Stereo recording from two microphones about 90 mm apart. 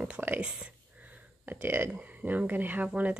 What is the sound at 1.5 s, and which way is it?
A woman's voice, 25° right (ahead or behind).